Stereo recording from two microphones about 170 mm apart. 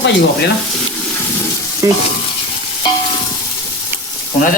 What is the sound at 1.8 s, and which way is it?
Stir, 20° right (ahead or behind).